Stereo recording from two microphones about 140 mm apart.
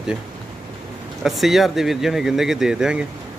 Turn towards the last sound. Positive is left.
turn(degrees=-5)  # may be behind; listen again after turning